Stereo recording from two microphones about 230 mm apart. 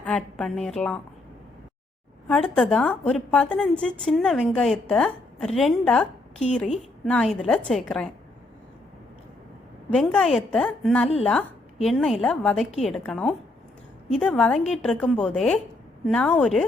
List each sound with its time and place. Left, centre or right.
0.0 s a woman's voice: centre
2.2 s a woman's voice: centre
9.9 s a woman's voice: centre